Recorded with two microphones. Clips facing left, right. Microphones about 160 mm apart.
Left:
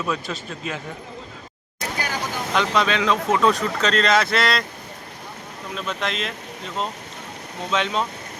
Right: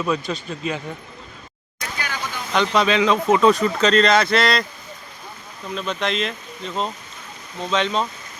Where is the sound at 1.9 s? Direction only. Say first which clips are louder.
Left 2 dB; 40° left (ahead or behind).